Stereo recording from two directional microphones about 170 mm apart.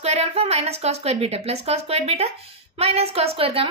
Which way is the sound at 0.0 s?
40° right (ahead or behind).